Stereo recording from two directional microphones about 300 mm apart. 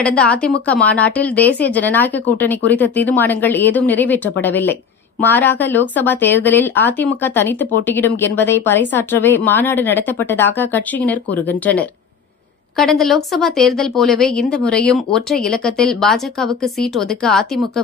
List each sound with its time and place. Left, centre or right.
0.0 s speech: centre